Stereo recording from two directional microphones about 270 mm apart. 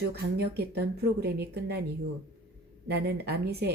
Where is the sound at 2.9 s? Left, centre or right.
Right.